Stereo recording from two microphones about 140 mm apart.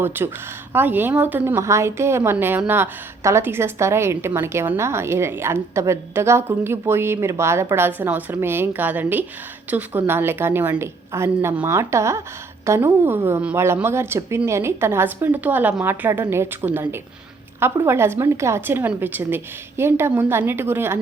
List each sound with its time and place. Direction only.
0.0 s a woman's voice: 15° right (ahead or behind)